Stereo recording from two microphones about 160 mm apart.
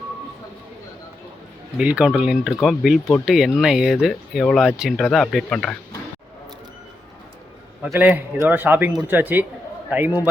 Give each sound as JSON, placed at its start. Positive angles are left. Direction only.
{"t": 1.8, "sound": "speech", "side_deg": -5}
{"t": 7.9, "sound": "a man's voice", "side_deg": -10}